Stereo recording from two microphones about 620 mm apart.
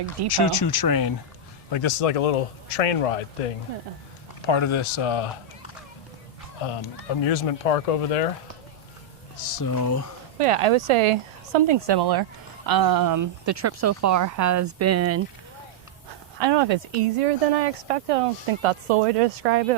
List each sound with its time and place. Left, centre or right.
0.3 s speech: left
1.7 s speech: left
4.4 s speech: left
7.3 s speech: left
9.6 s speech: left
10.3 s speech: right
16.4 s speech: right